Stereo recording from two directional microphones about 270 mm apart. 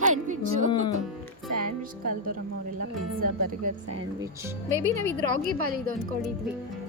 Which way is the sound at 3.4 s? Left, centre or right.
Right.